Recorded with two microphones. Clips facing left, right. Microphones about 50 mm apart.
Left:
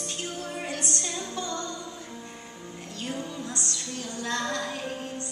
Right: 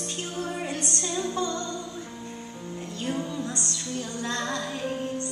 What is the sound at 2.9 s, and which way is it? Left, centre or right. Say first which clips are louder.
Music: right 4 dB; right.